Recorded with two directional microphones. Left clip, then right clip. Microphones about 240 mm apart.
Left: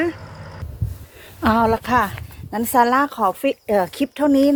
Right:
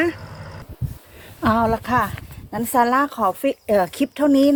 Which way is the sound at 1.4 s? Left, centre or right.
Left.